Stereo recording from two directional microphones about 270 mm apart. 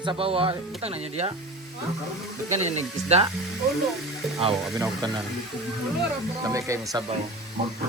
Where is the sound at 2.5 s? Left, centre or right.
Right.